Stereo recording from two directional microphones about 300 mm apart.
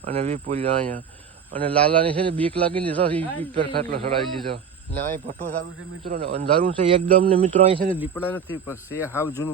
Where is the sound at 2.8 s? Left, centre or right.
Centre.